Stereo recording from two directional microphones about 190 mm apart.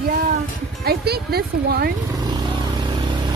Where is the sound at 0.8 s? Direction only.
55° right (ahead or behind).